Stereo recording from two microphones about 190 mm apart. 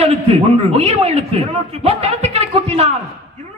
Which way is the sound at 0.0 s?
30° right (ahead or behind).